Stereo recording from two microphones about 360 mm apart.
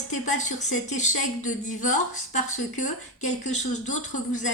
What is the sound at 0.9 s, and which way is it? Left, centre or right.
A woman's voice, centre.